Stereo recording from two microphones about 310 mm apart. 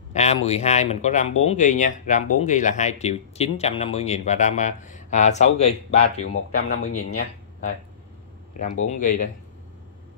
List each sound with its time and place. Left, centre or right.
0.1 s a sound: left
0.5 s speech: left
8.5 s speech: left